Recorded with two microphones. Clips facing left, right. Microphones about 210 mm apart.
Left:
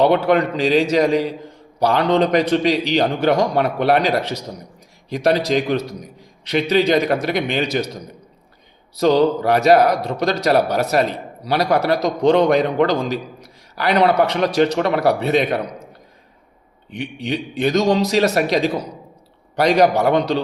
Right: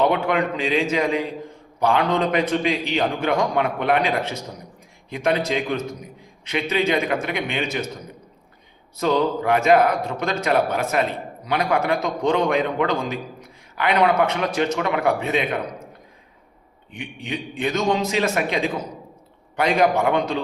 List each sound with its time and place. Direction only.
0.0 s a man's voice: 35° left (ahead or behind)
9.0 s a man's voice: 35° left (ahead or behind)
16.9 s a man's voice: 35° left (ahead or behind)